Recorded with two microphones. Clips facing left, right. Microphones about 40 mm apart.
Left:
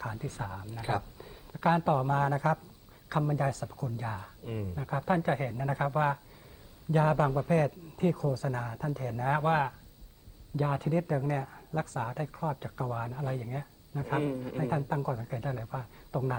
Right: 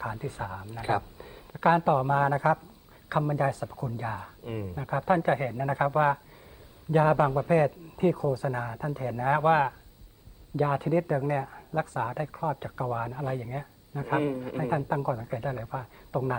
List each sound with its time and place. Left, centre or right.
0.0 s speech: centre